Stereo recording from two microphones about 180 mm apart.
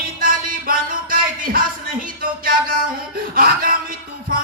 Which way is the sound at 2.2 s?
55° right (ahead or behind).